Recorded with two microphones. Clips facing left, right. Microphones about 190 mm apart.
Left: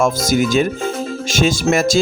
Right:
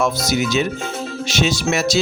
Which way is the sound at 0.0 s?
50° left (ahead or behind).